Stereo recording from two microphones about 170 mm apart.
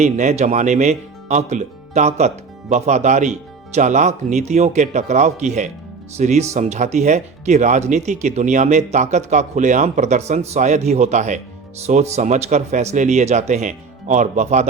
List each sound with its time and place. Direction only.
0.0 s speech: 45° right (ahead or behind)